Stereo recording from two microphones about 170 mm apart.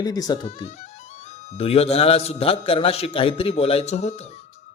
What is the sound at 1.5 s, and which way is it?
A man's voice, 35° left (ahead or behind).